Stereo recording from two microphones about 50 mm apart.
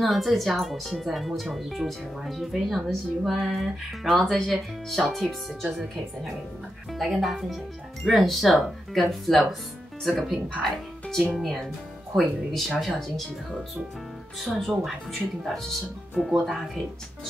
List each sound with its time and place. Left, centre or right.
0.0 s speech: centre
10.6 s speech: centre
14.4 s speech: centre
16.5 s speech: centre